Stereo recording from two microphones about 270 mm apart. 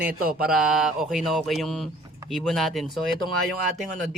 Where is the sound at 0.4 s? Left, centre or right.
Centre.